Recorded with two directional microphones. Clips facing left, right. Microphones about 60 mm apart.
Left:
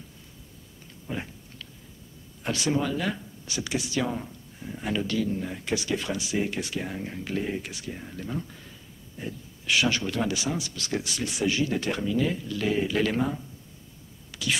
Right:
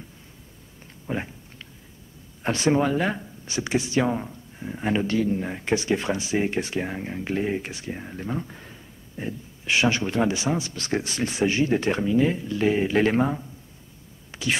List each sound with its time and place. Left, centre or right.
1.0 s a sound: right
2.4 s speech: right
14.3 s whispering: right